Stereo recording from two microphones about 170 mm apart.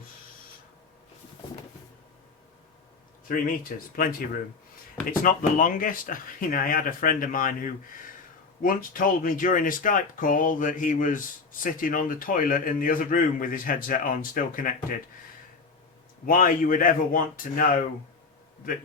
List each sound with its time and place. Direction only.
3.2 s a man's voice: 55° left (ahead or behind)
16.2 s a man's voice: 55° left (ahead or behind)